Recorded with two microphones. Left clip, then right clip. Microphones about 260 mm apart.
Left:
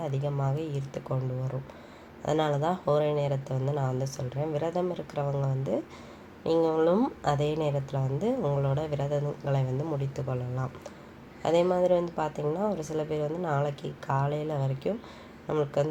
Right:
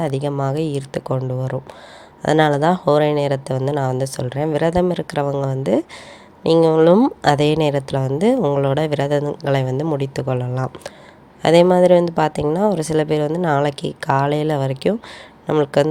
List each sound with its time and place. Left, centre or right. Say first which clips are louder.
0.0 s speech: right 11 dB; right